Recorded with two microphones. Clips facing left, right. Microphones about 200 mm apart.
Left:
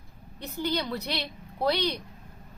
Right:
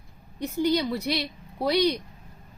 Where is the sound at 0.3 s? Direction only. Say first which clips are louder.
Right 6 dB; 15° right (ahead or behind).